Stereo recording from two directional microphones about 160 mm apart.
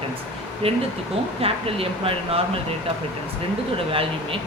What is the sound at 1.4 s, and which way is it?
Speech, 35° right (ahead or behind).